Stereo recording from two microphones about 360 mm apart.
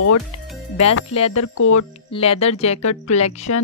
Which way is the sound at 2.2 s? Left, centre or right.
Centre.